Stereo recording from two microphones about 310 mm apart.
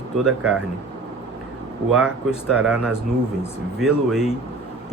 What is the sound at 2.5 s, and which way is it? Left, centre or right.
Speech, centre.